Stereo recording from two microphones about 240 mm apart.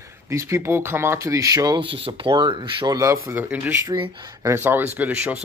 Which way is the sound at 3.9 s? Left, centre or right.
Centre.